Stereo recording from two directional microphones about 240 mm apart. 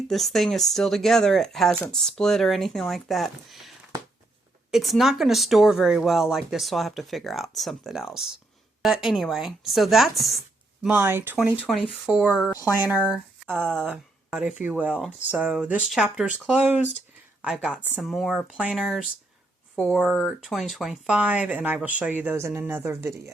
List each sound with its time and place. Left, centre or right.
0.1 s speech: centre
12.5 s speech: centre
13.0 s speech: centre